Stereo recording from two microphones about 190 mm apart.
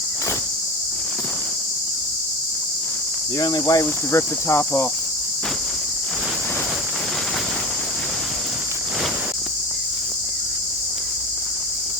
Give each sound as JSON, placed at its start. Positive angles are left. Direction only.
{"t": 3.3, "sound": "cricket", "side_deg": 20}